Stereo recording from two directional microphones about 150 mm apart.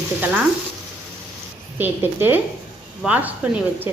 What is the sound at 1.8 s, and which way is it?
Speech, 15° right (ahead or behind).